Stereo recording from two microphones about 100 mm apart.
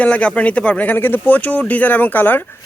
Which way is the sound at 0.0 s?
10° left (ahead or behind).